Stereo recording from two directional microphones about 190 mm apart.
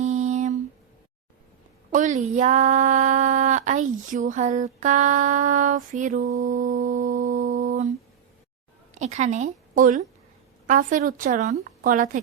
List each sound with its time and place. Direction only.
0.0 s a sound: 35° right (ahead or behind)
1.9 s speech: 40° right (ahead or behind)
9.0 s a woman's voice: 40° right (ahead or behind)